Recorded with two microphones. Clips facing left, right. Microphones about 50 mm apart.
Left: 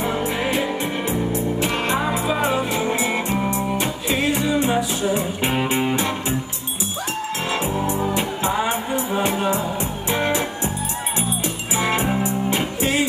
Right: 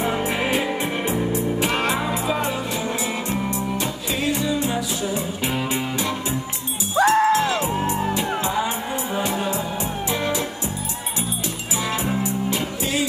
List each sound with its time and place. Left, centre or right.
0.0 s music: right
1.6 s music: right
2.2 s music: left
7.0 s music: right
7.3 s music: left
7.8 s music: right
8.4 s music: left
11.7 s music: left